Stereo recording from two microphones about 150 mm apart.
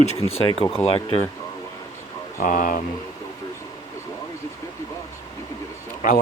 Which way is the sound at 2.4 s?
65° left (ahead or behind).